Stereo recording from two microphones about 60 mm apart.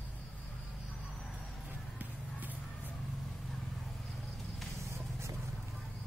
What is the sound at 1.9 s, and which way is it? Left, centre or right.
Music, right.